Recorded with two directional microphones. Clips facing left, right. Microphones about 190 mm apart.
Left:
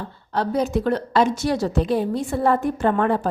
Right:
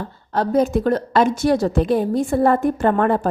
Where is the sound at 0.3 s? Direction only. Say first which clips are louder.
Right 4 dB; 50° right (ahead or behind).